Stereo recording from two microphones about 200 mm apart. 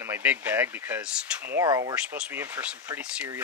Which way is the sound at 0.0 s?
10° right (ahead or behind).